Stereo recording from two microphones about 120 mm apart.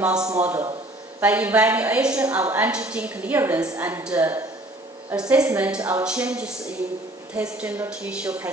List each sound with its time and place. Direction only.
0.0 s a woman's voice: 5° right (ahead or behind)
0.4 s a woman's voice: 20° right (ahead or behind)